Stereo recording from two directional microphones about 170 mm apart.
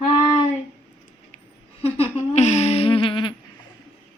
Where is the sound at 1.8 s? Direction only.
40° left (ahead or behind).